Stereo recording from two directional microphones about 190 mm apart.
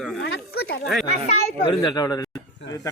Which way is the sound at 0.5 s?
55° left (ahead or behind).